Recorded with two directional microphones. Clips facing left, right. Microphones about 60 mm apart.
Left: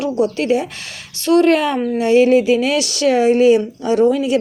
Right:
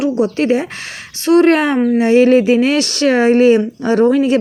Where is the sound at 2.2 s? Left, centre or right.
Right.